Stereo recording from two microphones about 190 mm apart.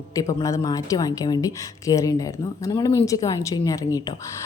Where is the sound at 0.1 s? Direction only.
20° left (ahead or behind).